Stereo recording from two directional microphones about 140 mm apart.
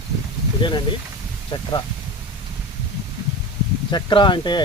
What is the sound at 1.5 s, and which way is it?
Speech, 35° left (ahead or behind).